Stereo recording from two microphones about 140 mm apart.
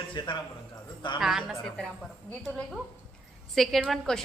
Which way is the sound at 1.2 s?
5° right (ahead or behind).